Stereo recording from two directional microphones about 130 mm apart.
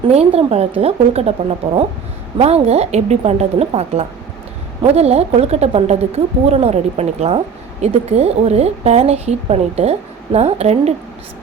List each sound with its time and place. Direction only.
0.1 s a woman's voice: 50° right (ahead or behind)